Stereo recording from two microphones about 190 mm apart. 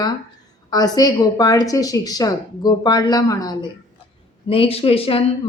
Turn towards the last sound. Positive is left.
turn(degrees=30)  # may be behind; listen again after turning